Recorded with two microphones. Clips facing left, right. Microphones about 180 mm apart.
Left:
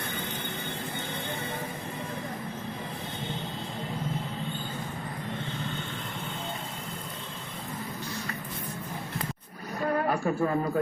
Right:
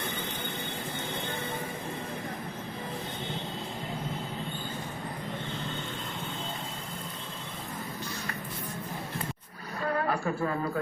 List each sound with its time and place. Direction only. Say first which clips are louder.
9.8 s music: left 2 dB; 35° left (ahead or behind)